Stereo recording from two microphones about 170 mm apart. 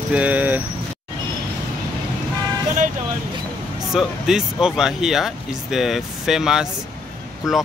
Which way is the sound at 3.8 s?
5° right (ahead or behind).